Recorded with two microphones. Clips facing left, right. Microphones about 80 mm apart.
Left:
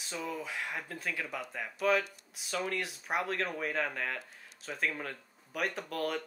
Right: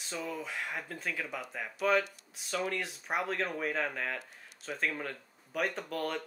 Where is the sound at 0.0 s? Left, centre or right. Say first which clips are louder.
Even; centre.